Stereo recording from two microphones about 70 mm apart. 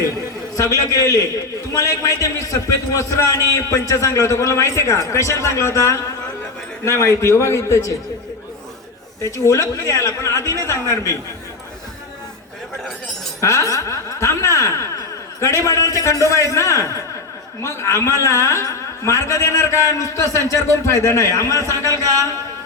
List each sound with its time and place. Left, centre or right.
0.5 s a man's voice: left
9.2 s a man's voice: left
13.4 s a man's voice: left